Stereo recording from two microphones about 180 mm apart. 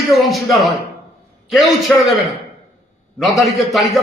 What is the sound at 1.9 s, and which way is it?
Speech, 5° left (ahead or behind).